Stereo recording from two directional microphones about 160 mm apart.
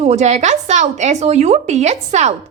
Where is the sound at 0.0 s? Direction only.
45° right (ahead or behind).